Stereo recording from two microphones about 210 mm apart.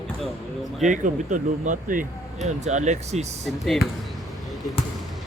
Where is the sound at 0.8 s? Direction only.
35° right (ahead or behind).